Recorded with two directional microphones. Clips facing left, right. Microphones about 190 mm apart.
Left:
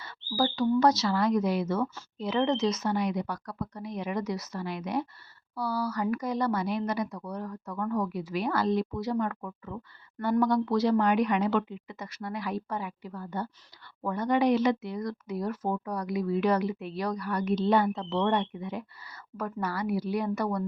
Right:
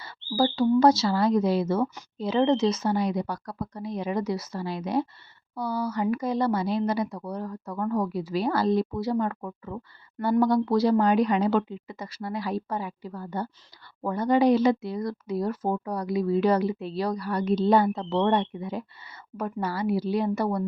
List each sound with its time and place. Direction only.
0.0 s speech: 30° right (ahead or behind)